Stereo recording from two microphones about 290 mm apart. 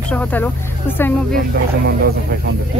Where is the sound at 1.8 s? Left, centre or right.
Right.